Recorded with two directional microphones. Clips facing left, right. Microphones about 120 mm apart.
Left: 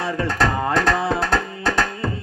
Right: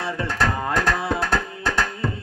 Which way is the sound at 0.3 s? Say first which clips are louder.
Left 3 dB; 10° right (ahead or behind).